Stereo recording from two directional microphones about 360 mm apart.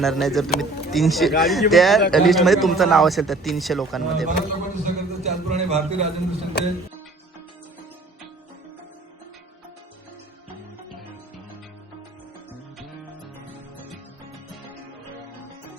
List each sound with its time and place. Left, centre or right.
0.0 s a man's voice: centre
4.3 s a man's voice: right